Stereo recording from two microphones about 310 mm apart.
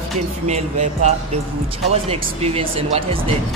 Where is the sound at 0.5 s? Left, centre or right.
Right.